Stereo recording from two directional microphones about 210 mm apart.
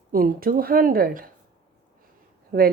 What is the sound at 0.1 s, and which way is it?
A woman's voice, 45° right (ahead or behind).